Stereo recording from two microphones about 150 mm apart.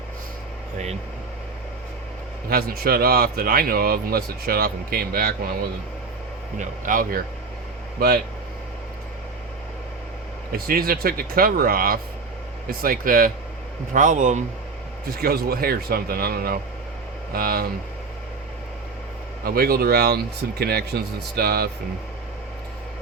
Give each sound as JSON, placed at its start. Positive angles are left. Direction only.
{"t": 2.5, "sound": "a man's voice", "side_deg": -80}
{"t": 6.6, "sound": "speech", "side_deg": -65}
{"t": 7.9, "sound": "speech", "side_deg": -90}
{"t": 10.5, "sound": "speech", "side_deg": -80}
{"t": 13.9, "sound": "speech", "side_deg": -55}
{"t": 15.0, "sound": "speech", "side_deg": -90}
{"t": 17.3, "sound": "a man's voice", "side_deg": -80}
{"t": 19.5, "sound": "speech", "side_deg": -90}